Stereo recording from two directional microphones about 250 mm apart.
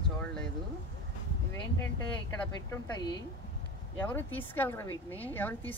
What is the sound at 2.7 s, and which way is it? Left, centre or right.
Speech, centre.